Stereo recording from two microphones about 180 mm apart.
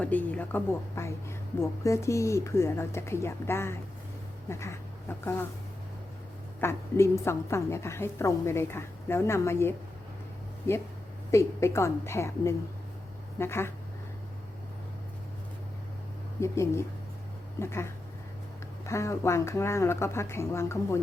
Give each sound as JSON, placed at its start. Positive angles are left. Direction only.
{"t": 0.0, "sound": "a woman's voice", "side_deg": 10}
{"t": 6.6, "sound": "a woman's voice", "side_deg": 15}
{"t": 16.4, "sound": "a woman's voice", "side_deg": 15}